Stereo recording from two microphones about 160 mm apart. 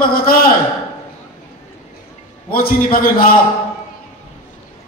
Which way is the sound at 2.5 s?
65° left (ahead or behind).